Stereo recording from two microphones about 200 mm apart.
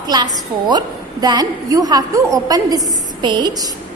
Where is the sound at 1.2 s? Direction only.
20° right (ahead or behind).